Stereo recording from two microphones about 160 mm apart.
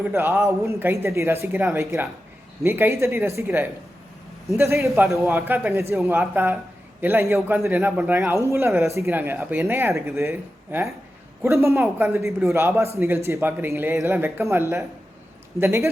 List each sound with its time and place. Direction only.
0.0 s speech: 15° right (ahead or behind)